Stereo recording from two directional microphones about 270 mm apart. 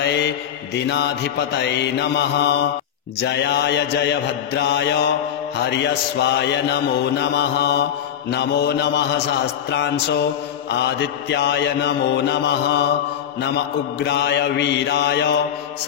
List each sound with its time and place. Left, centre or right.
0.0 s a man's voice: left
0.8 s mantra: left
6.1 s mantra: left
13.9 s mantra: left